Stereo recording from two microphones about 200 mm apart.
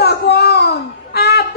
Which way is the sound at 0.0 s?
55° left (ahead or behind).